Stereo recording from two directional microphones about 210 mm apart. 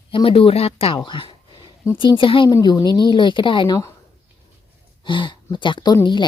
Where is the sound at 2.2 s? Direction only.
25° left (ahead or behind).